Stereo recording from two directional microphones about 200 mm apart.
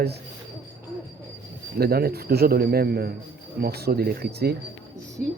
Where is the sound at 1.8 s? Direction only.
50° right (ahead or behind).